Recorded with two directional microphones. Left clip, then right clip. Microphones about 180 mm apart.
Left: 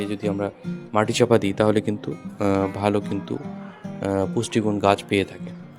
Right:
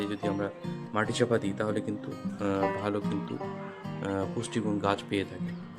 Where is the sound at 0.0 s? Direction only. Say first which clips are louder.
Left 6 dB; 30° left (ahead or behind).